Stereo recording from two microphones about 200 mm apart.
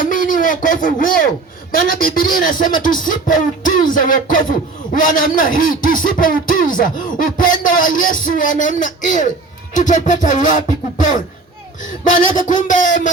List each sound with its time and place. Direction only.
0.0 s a sound: 40° left (ahead or behind)
1.7 s speech: 45° left (ahead or behind)
9.7 s music: 40° left (ahead or behind)